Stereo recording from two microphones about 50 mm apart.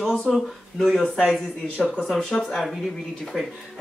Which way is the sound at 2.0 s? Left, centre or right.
Centre.